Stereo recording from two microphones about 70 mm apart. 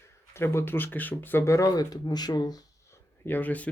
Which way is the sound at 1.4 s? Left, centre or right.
Left.